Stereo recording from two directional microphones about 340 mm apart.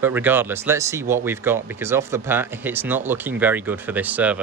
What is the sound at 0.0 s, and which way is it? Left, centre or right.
Speech, centre.